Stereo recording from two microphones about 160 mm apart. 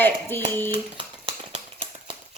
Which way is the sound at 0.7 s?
35° right (ahead or behind).